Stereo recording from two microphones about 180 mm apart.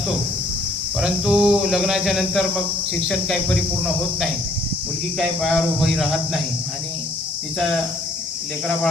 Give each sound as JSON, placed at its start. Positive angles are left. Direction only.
{"t": 0.9, "sound": "speech", "side_deg": -5}
{"t": 5.2, "sound": "speech", "side_deg": 0}